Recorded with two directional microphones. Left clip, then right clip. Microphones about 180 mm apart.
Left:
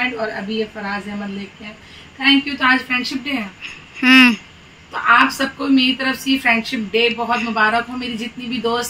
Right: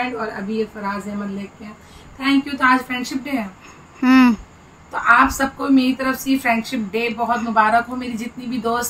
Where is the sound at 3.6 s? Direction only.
15° right (ahead or behind).